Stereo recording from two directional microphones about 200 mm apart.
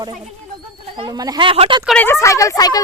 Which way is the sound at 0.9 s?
20° right (ahead or behind).